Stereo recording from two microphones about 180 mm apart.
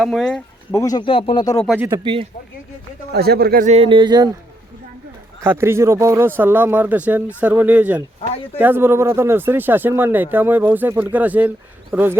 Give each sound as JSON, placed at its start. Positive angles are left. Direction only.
{"t": 0.0, "sound": "speech", "side_deg": 0}
{"t": 0.7, "sound": "speech", "side_deg": 20}
{"t": 3.1, "sound": "speech", "side_deg": -60}
{"t": 3.7, "sound": "speech", "side_deg": -30}
{"t": 5.4, "sound": "speech", "side_deg": -15}